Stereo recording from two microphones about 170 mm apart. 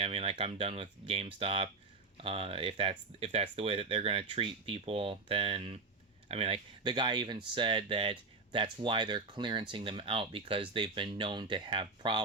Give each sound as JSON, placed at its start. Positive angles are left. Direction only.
{"t": 0.0, "sound": "speech", "side_deg": -35}